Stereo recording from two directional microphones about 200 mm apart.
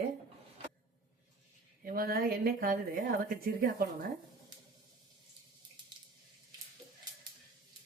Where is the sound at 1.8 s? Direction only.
45° right (ahead or behind).